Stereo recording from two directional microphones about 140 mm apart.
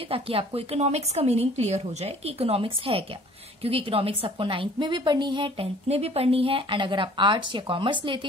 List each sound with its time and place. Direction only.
0.0 s a woman's voice: 40° right (ahead or behind)